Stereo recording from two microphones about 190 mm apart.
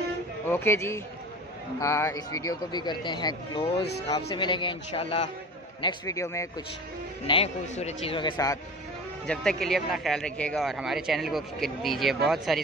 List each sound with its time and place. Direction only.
0.5 s a man's voice: 15° left (ahead or behind)
7.2 s speech: 30° left (ahead or behind)
9.2 s speech: 5° left (ahead or behind)